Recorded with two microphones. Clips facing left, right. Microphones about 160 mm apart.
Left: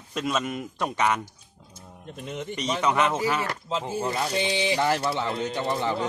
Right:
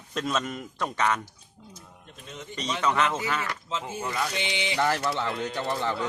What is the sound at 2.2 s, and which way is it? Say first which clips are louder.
Speech: left 8 dB; 60° left (ahead or behind).